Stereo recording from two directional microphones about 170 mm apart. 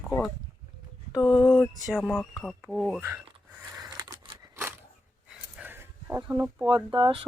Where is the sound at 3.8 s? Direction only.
25° right (ahead or behind).